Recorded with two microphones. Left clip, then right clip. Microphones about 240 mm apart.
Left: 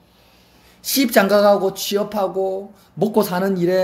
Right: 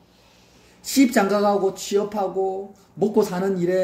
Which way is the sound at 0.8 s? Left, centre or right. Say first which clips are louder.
Left 3 dB; left.